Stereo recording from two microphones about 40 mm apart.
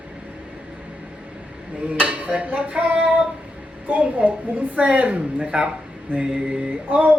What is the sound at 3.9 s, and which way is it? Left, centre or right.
A woman's voice, right.